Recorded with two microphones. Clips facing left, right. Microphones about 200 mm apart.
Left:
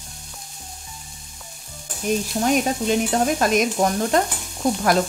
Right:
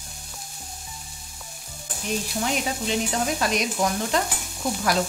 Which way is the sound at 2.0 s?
45° left (ahead or behind).